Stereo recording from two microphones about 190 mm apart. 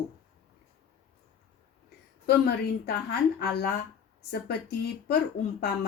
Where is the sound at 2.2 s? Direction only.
55° left (ahead or behind).